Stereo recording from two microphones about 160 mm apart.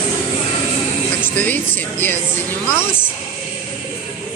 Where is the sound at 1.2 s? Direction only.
10° left (ahead or behind).